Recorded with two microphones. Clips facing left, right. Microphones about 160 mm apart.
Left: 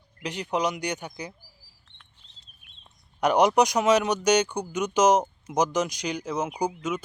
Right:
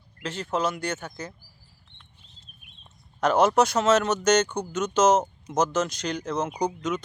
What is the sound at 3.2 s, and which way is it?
Speech, 15° left (ahead or behind).